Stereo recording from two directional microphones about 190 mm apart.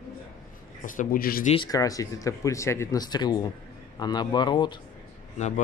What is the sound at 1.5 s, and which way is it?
Speech, 20° left (ahead or behind).